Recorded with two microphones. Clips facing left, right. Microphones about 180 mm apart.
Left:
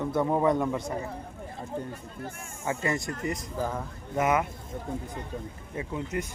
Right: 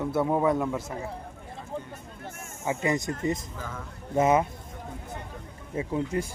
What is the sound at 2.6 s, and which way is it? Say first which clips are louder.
Speech: right 2 dB; 15° right (ahead or behind).